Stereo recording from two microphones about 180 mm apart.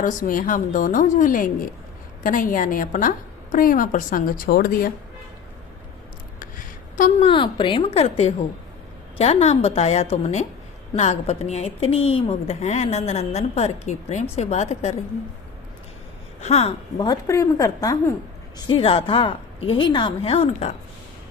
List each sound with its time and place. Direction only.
0.0 s a woman's voice: 45° left (ahead or behind)
6.9 s a woman's voice: 45° left (ahead or behind)
7.3 s a woman's voice: 25° left (ahead or behind)
16.4 s a woman's voice: 35° left (ahead or behind)
17.0 s a woman's voice: 20° left (ahead or behind); by 20.7 s 35° left (ahead or behind)